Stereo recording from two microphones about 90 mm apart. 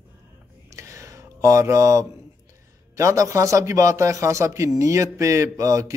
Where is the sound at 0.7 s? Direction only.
35° right (ahead or behind).